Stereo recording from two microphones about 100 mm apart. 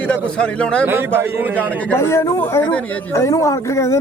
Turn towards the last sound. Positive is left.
turn(degrees=30)  # may be behind; listen again after turning